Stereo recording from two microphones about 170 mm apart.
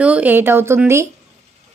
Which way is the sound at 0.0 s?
10° right (ahead or behind).